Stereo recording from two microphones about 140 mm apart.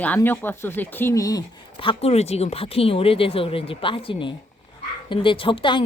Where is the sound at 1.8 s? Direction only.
45° left (ahead or behind).